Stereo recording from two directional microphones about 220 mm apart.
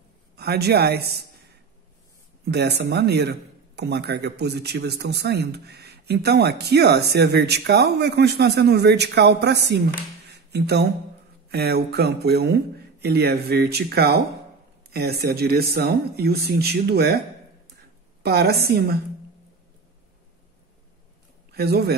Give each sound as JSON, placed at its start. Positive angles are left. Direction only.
{"t": 0.4, "sound": "a man's voice", "side_deg": -45}
{"t": 2.4, "sound": "a man's voice", "side_deg": -50}
{"t": 18.2, "sound": "a man's voice", "side_deg": -45}
{"t": 21.5, "sound": "speech", "side_deg": -45}